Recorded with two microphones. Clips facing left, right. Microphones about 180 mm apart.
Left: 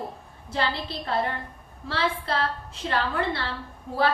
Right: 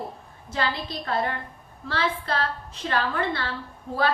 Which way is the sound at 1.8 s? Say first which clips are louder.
Even; 30° left (ahead or behind).